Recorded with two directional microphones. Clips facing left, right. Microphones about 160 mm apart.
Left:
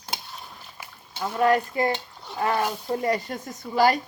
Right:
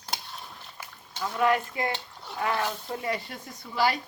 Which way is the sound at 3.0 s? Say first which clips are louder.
Left 6 dB; 40° left (ahead or behind).